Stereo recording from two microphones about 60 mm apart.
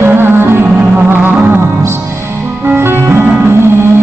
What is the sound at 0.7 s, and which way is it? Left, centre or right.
Music, right.